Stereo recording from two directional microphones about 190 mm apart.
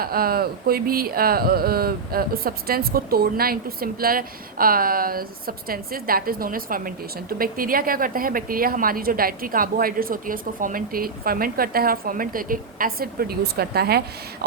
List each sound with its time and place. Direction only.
0.0 s speech: 50° right (ahead or behind)